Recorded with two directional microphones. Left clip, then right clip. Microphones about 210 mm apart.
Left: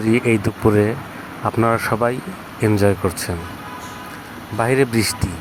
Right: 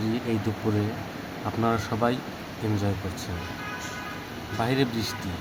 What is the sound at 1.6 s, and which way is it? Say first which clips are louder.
Speech: left 8 dB; 35° left (ahead or behind).